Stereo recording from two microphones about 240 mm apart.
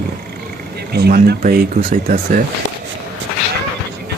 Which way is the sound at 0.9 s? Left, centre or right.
Right.